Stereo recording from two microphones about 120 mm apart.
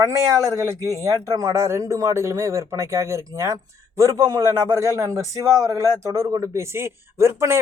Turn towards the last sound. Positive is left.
turn(degrees=-25)  # may be behind; listen again after turning